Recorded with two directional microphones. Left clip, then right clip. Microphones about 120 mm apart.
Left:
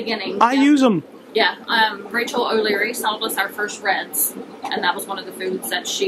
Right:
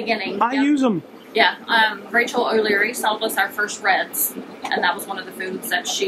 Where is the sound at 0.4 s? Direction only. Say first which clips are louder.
Left 6 dB; 20° left (ahead or behind).